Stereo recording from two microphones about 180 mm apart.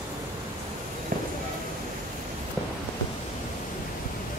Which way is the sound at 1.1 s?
50° right (ahead or behind).